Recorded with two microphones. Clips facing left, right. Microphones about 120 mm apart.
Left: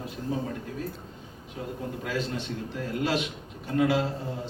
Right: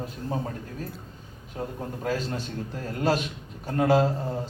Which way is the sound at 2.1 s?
40° right (ahead or behind).